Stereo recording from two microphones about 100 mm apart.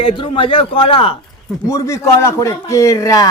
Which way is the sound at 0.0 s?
60° left (ahead or behind).